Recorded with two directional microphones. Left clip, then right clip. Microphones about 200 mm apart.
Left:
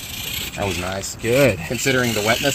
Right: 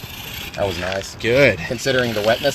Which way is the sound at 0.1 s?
60° left (ahead or behind).